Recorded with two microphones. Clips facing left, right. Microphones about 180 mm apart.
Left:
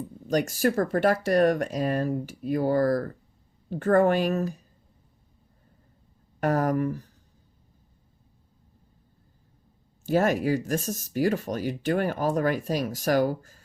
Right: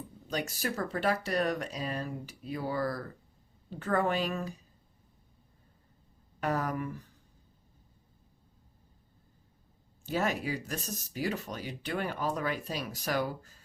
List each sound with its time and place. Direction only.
0.3 s speech: 45° left (ahead or behind)
6.4 s speech: 45° left (ahead or behind)
10.1 s speech: 45° left (ahead or behind)